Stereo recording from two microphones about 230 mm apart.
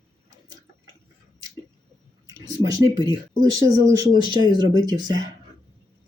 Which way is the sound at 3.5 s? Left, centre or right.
Centre.